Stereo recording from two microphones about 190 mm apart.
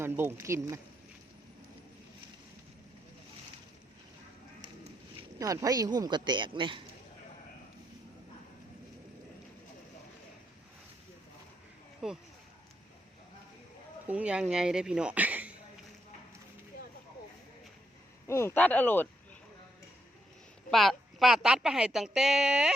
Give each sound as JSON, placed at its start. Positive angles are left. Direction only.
{"t": 0.0, "sound": "speech", "side_deg": -10}
{"t": 5.4, "sound": "speech", "side_deg": -20}
{"t": 12.0, "sound": "speech", "side_deg": -5}
{"t": 14.1, "sound": "speech", "side_deg": -5}
{"t": 18.3, "sound": "speech", "side_deg": 15}
{"t": 20.7, "sound": "speech", "side_deg": 0}